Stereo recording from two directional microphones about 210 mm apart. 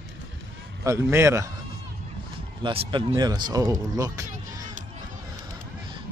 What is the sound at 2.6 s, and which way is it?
Speech, 25° right (ahead or behind).